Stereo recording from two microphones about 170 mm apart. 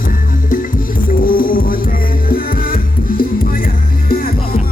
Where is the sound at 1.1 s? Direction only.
55° left (ahead or behind).